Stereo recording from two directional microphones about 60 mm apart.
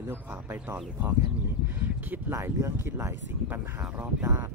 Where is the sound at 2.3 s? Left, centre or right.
Right.